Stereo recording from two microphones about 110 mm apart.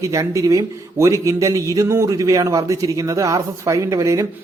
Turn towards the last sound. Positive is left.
turn(degrees=-30)  # may be behind; listen again after turning